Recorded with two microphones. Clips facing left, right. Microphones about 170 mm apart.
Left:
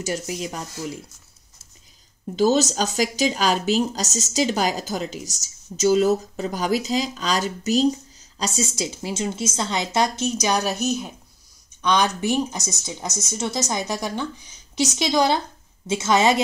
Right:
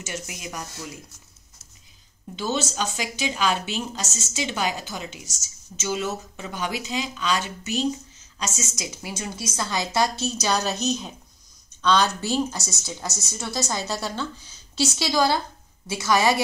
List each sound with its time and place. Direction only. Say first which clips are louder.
0.0 s speech: left 8 dB; 35° left (ahead or behind)
2.3 s a woman's voice: left 8 dB; 40° left (ahead or behind); by 16.4 s 20° left (ahead or behind)